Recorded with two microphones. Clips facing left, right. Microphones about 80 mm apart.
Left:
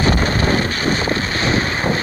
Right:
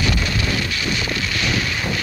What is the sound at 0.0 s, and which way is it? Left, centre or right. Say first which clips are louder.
Wind noise: left 6 dB; left.